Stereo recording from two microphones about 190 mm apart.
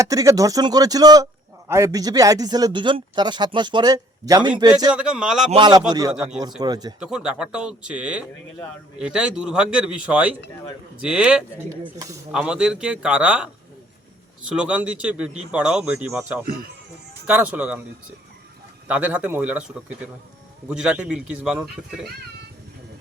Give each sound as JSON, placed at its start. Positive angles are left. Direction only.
{"t": 0.0, "sound": "speech", "side_deg": -15}
{"t": 4.9, "sound": "a man's voice", "side_deg": -5}
{"t": 5.5, "sound": "speech", "side_deg": -25}
{"t": 7.0, "sound": "a man's voice", "side_deg": -5}
{"t": 11.8, "sound": "speech", "side_deg": -20}
{"t": 12.3, "sound": "a man's voice", "side_deg": -5}
{"t": 18.9, "sound": "a man's voice", "side_deg": -5}